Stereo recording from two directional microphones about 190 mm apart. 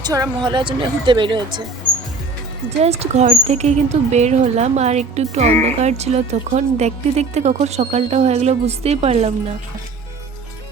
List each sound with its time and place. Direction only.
0.0 s a woman's voice: 20° right (ahead or behind)
2.8 s a woman's voice: 35° right (ahead or behind)